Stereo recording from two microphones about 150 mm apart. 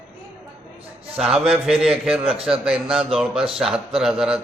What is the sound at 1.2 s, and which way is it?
A man's voice, 5° right (ahead or behind).